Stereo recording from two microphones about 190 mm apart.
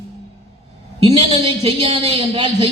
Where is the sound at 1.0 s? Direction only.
30° right (ahead or behind).